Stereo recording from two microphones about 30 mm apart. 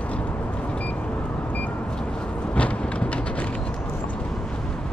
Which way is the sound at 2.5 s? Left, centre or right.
Left.